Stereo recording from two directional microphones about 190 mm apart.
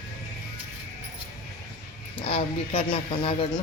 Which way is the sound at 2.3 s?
30° left (ahead or behind).